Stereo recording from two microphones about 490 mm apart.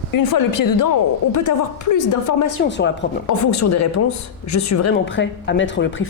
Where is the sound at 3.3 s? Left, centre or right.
Left.